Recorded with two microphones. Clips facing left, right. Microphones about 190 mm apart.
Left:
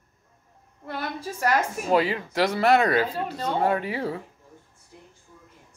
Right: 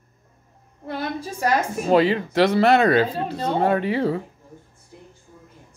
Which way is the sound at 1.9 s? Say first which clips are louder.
Right 5 dB; 25° right (ahead or behind).